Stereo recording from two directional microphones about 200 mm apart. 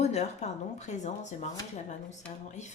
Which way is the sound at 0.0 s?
35° left (ahead or behind).